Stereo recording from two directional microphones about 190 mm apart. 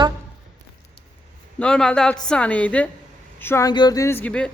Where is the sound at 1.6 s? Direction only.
5° left (ahead or behind).